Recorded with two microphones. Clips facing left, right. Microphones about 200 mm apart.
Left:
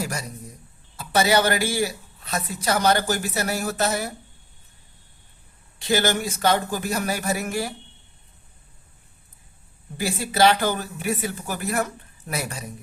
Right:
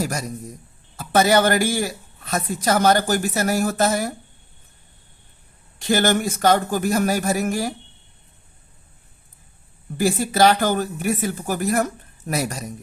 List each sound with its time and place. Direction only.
0.0 s a sound: 40° right (ahead or behind)
0.9 s a man's voice: 50° right (ahead or behind)
5.9 s a man's voice: 50° right (ahead or behind)
10.0 s a man's voice: 45° right (ahead or behind)